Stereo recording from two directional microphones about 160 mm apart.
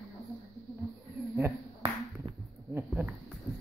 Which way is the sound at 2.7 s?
10° right (ahead or behind).